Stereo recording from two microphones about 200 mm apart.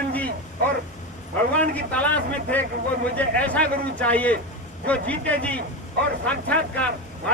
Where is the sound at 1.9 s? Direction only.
5° left (ahead or behind).